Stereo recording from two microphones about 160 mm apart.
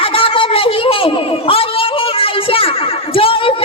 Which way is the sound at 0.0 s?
35° left (ahead or behind).